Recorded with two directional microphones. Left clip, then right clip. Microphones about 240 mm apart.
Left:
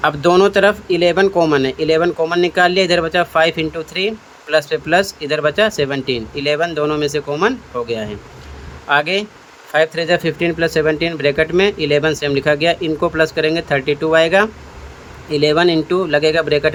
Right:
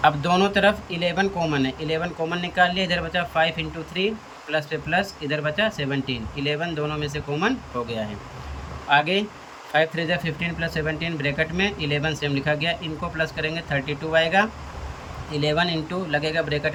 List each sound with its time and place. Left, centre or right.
0.0 s speech: centre